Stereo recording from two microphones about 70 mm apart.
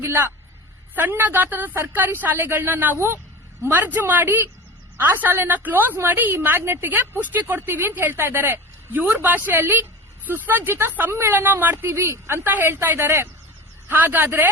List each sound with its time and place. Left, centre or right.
0.0 s a woman's voice: right